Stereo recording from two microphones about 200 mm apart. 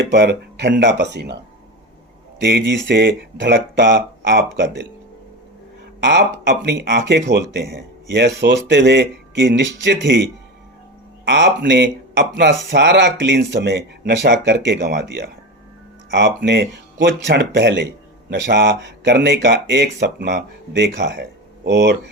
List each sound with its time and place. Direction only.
0.1 s speech: 60° right (ahead or behind)
2.4 s speech: 60° right (ahead or behind)
6.0 s speech: 60° right (ahead or behind)
11.3 s speech: 65° right (ahead or behind)